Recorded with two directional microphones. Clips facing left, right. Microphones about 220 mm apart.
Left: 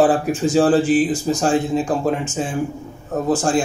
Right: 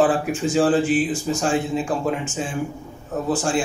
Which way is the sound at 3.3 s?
40° left (ahead or behind).